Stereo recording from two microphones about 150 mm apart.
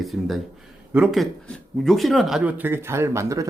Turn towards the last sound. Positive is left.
turn(degrees=-20)  # may be behind; listen again after turning